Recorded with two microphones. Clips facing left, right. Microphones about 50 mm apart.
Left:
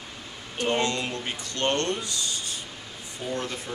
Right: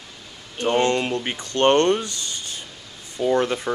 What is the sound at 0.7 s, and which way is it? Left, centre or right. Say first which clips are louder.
Speech: right 7 dB; right.